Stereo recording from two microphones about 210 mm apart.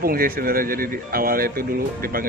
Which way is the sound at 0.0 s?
45° right (ahead or behind).